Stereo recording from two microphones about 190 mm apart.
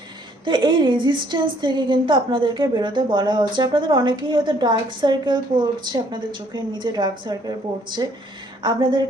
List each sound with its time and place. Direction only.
0.4 s a woman's voice: 25° right (ahead or behind)